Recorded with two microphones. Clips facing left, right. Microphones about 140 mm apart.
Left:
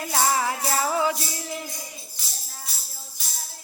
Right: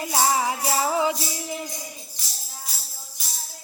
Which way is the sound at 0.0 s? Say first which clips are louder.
Right 1 dB; 15° right (ahead or behind).